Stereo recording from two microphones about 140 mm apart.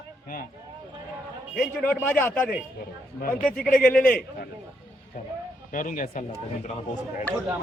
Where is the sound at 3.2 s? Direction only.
85° left.